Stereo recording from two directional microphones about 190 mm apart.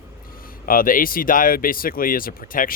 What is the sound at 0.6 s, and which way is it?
Speech, 50° left (ahead or behind).